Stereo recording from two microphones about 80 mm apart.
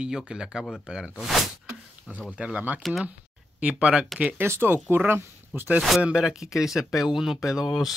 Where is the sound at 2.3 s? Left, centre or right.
Centre.